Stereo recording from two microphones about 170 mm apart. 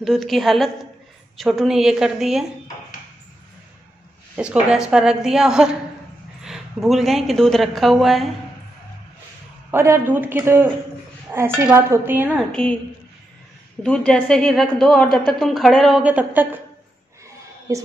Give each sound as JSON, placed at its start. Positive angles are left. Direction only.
{"t": 0.0, "sound": "speech", "side_deg": 0}
{"t": 4.4, "sound": "speech", "side_deg": -5}
{"t": 9.7, "sound": "speech", "side_deg": -15}
{"t": 12.4, "sound": "speech", "side_deg": 5}
{"t": 13.8, "sound": "speech", "side_deg": 5}
{"t": 17.7, "sound": "a woman's voice", "side_deg": -20}